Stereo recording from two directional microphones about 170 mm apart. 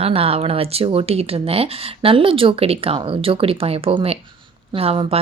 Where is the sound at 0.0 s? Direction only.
35° right (ahead or behind).